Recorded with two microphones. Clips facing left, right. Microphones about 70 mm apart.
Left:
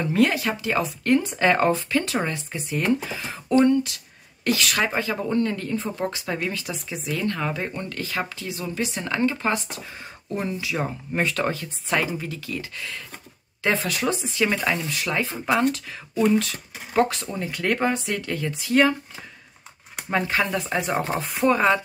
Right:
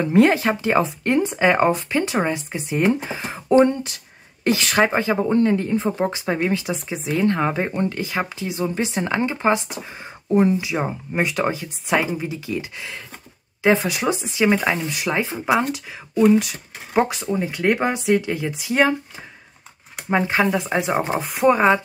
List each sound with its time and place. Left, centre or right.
0.0 s speech: right
15.3 s speech: centre
20.1 s speech: right